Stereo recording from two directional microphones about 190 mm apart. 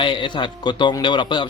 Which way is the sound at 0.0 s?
25° left (ahead or behind).